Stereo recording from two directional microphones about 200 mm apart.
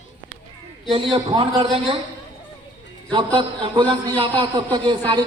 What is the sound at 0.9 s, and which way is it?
Speech, 25° right (ahead or behind).